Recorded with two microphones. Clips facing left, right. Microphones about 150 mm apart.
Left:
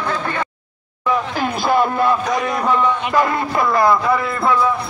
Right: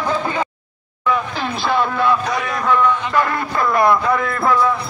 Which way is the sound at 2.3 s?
20° left (ahead or behind).